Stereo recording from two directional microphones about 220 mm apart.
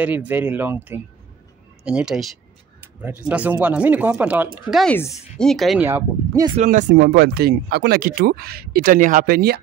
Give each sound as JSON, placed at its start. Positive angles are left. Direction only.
{"t": 0.0, "sound": "speech", "side_deg": -5}
{"t": 6.6, "sound": "speech", "side_deg": -35}